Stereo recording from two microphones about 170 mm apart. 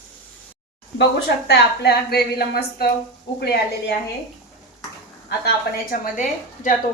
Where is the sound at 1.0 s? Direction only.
80° left.